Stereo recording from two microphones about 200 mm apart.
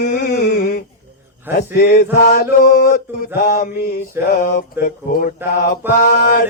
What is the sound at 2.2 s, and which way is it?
Mantra, 45° left (ahead or behind).